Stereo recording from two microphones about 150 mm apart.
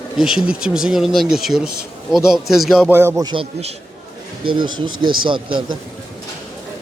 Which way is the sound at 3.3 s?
35° right (ahead or behind).